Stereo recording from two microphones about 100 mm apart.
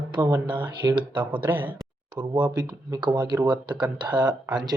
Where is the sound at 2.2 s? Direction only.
50° right (ahead or behind).